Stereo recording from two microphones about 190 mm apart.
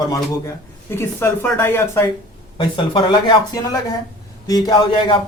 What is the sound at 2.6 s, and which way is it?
Speech, 25° left (ahead or behind).